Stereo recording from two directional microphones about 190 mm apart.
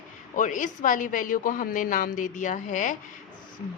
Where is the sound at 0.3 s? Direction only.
40° left (ahead or behind).